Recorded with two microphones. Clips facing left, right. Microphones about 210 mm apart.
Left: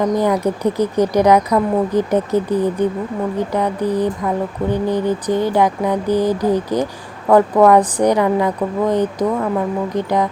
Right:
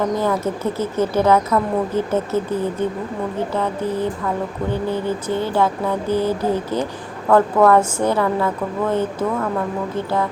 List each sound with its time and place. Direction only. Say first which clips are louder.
0.2 s speech: left 4 dB; 15° left (ahead or behind)